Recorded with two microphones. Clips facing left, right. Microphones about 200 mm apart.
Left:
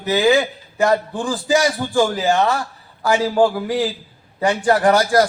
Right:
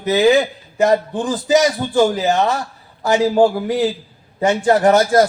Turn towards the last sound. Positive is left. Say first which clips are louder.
# right 2 dB
turn(degrees=-25)  # may be behind; listen again after turning